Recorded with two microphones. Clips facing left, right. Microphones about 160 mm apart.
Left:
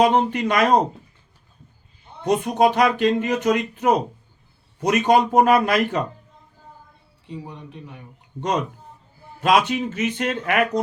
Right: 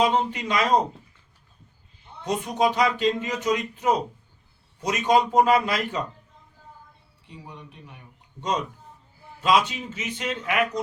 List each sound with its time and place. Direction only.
0.0 s speech: 60° left (ahead or behind)
2.2 s speech: 60° left (ahead or behind)
7.3 s speech: 30° left (ahead or behind)
8.4 s speech: 60° left (ahead or behind)